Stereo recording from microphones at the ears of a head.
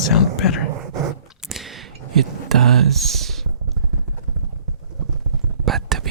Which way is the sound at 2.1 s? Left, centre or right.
Right.